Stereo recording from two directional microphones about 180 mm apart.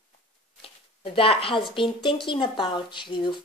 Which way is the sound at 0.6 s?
30° left (ahead or behind).